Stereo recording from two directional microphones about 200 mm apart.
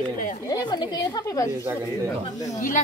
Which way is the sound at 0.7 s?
20° left (ahead or behind).